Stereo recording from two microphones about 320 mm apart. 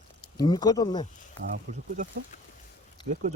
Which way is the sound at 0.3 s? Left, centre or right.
Centre.